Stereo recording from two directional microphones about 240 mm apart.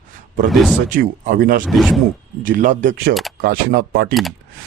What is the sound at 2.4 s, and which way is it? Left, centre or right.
Speech, right.